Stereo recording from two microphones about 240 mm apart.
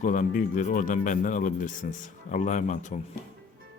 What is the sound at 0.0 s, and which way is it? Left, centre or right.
Speech, left.